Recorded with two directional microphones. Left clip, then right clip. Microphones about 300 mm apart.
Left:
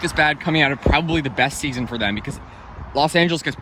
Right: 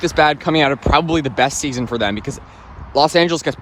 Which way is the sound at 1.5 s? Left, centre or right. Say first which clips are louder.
Right 3 dB; right.